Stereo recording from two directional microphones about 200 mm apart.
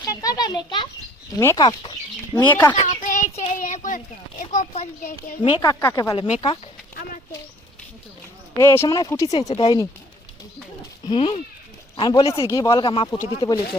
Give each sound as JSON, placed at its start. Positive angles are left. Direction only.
{"t": 0.0, "sound": "a child's voice", "side_deg": 15}
{"t": 2.8, "sound": "child singing", "side_deg": 40}
{"t": 5.8, "sound": "speech", "side_deg": 15}
{"t": 8.5, "sound": "speech", "side_deg": 10}
{"t": 11.0, "sound": "speech", "side_deg": 25}